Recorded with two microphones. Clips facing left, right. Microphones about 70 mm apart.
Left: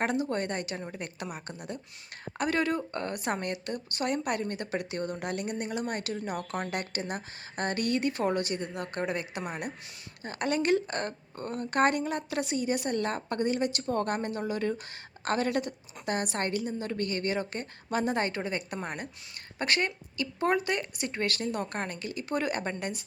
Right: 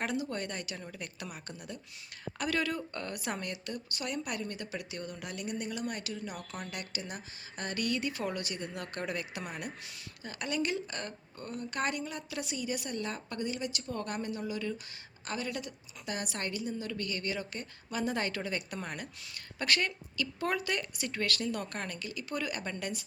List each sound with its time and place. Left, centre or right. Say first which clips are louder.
0.0 s a woman's voice: left 5 dB; left
10.2 s a woman's voice: left 7 dB; left